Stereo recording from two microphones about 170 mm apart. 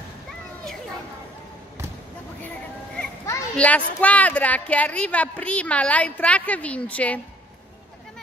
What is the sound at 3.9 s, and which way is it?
A woman's voice, 10° left (ahead or behind).